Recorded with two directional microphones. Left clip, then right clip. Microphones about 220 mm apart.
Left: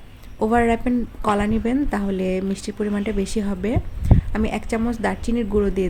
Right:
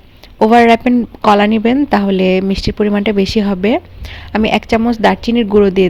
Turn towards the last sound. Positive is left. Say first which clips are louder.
# right 11 dB
turn(degrees=-30)  # may be behind; listen again after turning